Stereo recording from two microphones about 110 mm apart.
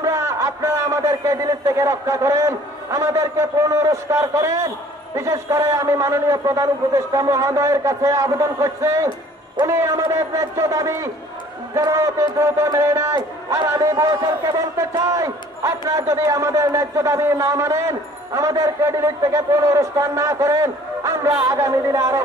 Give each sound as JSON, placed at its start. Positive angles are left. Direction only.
{"t": 0.0, "sound": "a man's voice", "side_deg": -25}